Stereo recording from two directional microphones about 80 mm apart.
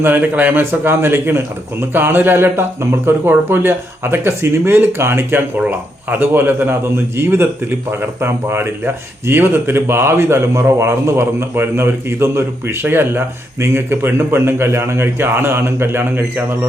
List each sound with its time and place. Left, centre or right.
0.0 s a man's voice: right